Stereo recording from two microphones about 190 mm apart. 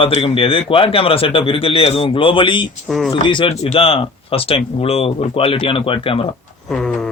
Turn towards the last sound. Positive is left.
turn(degrees=30)  # may be behind; listen again after turning